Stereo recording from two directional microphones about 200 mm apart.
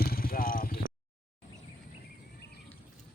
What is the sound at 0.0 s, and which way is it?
Vehicle, 50° left (ahead or behind).